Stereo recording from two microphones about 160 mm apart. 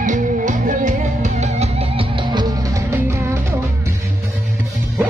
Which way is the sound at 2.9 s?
15° right (ahead or behind).